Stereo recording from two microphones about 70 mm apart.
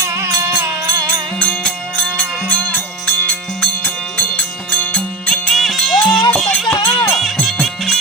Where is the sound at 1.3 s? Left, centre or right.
Centre.